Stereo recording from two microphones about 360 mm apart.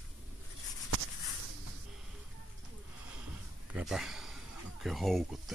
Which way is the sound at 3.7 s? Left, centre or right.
Centre.